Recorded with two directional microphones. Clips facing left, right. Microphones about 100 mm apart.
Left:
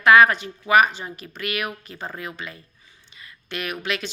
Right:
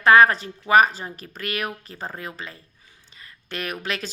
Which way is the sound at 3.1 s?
40° right (ahead or behind).